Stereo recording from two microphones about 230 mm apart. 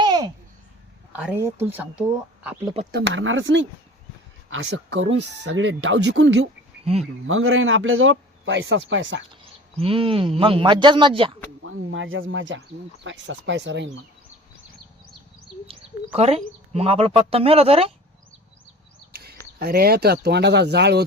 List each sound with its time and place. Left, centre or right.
0.0 s babbling: centre
1.1 s speech: centre
2.9 s speech: right
6.9 s speech: right
7.3 s speech: right
9.3 s speech: right
11.6 s speech: right
15.6 s speech: right
19.5 s speech: right